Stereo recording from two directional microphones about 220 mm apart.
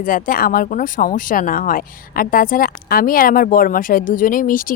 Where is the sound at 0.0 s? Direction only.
40° left (ahead or behind).